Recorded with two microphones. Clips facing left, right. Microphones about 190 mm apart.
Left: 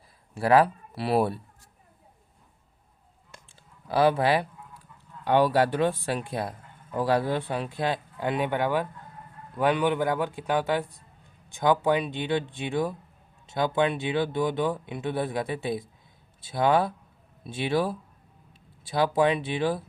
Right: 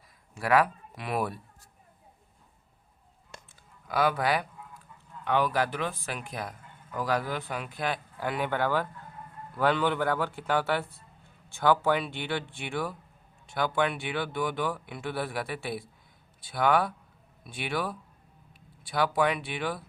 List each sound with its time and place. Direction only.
0.3 s speech: 30° left (ahead or behind)
3.5 s a sound: 30° left (ahead or behind)
5.2 s a man's voice: 35° left (ahead or behind)